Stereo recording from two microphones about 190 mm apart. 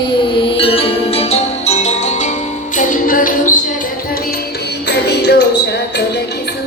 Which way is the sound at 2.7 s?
45° left (ahead or behind).